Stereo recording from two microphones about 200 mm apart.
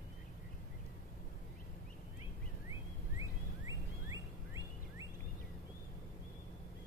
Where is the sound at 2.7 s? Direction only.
15° right (ahead or behind).